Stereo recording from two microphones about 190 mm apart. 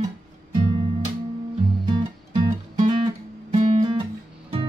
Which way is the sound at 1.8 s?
25° right (ahead or behind).